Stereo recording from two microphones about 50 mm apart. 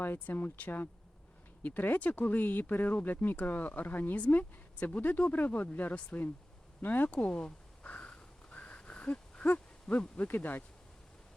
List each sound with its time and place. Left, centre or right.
0.3 s speech: left
7.1 s speech: left
7.9 s a sound: left
9.9 s speech: centre
10.2 s speech: left